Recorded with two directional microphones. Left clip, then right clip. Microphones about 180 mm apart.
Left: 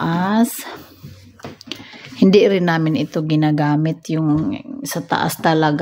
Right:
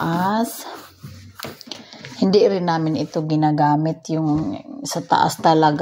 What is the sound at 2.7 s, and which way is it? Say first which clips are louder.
Speech: left 2 dB; 30° left (ahead or behind).